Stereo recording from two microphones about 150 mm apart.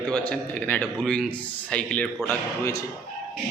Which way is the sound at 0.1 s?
10° left (ahead or behind).